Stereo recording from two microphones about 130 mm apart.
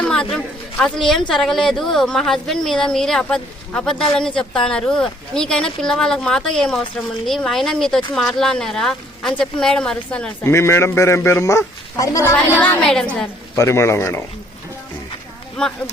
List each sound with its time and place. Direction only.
0.0 s a woman's voice: 5° left (ahead or behind)
10.4 s a man's voice: 20° left (ahead or behind)
13.6 s a man's voice: 20° left (ahead or behind)
15.6 s speech: 5° left (ahead or behind)